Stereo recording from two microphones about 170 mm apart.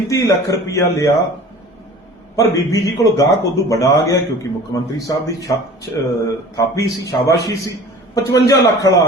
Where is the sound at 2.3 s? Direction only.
20° left (ahead or behind).